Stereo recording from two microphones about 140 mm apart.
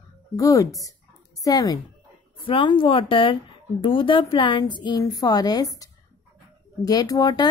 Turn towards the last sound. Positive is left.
turn(degrees=30)  # may be behind; listen again after turning